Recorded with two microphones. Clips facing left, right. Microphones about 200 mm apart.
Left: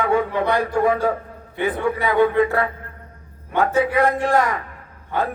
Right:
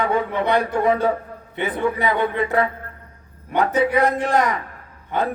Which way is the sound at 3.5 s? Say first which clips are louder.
Even; 20° right (ahead or behind).